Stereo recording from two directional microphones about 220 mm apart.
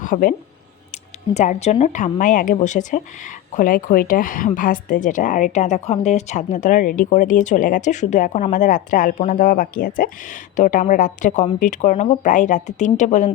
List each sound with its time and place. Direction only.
0.0 s speech: 40° left (ahead or behind)